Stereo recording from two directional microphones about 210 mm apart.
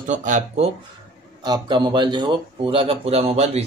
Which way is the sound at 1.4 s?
20° right (ahead or behind).